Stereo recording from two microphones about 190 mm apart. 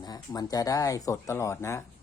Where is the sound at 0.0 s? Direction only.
20° left (ahead or behind).